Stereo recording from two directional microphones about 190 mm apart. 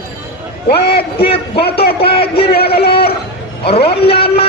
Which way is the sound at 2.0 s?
30° left (ahead or behind).